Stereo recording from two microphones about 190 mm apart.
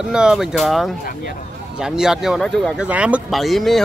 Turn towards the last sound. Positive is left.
turn(degrees=0)  # may be behind; listen again after turning